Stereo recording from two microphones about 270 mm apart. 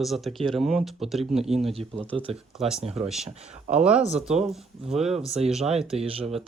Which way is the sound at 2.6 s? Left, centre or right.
Centre.